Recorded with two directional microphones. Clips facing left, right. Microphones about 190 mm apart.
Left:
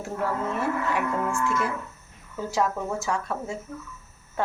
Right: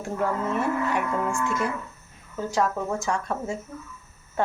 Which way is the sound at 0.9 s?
5° left (ahead or behind).